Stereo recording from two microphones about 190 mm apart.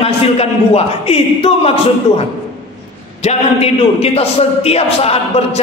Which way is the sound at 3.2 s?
35° left (ahead or behind).